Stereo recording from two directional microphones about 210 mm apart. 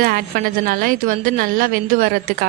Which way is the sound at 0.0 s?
45° right (ahead or behind).